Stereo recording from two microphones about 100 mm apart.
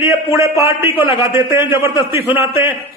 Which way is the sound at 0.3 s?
30° right (ahead or behind).